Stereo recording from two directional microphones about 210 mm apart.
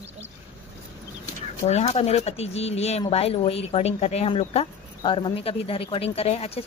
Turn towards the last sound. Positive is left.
turn(degrees=30)  # may be behind; listen again after turning